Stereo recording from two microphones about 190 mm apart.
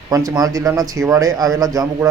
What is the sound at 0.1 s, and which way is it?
A man's voice, 20° right (ahead or behind).